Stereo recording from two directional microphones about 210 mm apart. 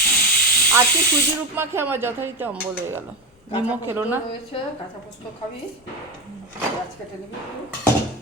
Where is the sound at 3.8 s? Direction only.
10° right (ahead or behind).